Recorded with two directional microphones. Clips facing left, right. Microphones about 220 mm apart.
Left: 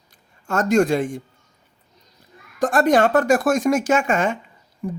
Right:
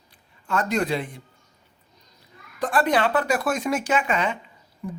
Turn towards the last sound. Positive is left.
turn(degrees=45)  # may be behind; listen again after turning